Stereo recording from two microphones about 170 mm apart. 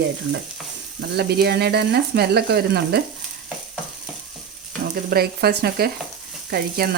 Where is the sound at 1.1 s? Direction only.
70° right (ahead or behind).